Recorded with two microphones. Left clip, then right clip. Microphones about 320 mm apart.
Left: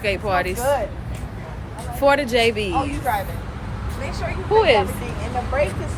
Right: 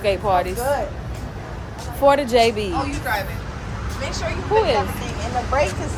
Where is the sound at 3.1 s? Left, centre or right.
Centre.